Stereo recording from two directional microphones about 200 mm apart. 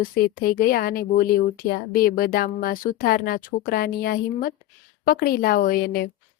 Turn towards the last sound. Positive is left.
turn(degrees=50)  # may be behind; listen again after turning